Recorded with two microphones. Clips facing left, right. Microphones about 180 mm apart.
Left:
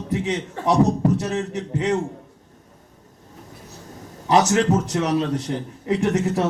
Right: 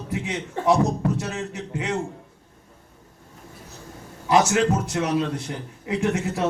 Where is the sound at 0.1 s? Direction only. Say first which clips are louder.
Left 5 dB; 40° left (ahead or behind).